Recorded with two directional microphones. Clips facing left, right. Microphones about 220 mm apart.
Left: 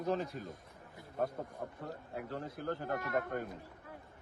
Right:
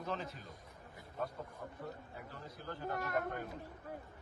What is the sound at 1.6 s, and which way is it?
Speech, 55° left (ahead or behind).